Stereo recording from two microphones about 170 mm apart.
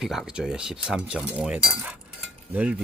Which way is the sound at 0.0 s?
5° right (ahead or behind).